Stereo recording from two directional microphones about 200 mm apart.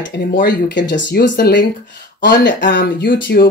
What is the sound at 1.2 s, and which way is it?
Speech, 45° left (ahead or behind).